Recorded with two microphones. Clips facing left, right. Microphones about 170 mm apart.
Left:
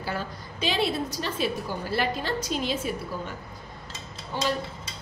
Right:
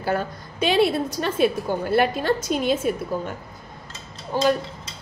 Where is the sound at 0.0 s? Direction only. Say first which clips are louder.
Right 7 dB; 55° right (ahead or behind).